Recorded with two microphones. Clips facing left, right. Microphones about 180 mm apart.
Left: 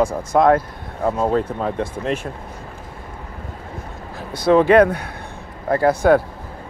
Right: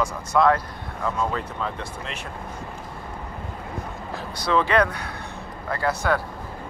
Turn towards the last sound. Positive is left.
turn(degrees=50)  # may be behind; listen again after turning